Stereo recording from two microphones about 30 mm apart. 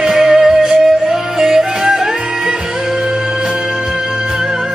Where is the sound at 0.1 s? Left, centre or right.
Centre.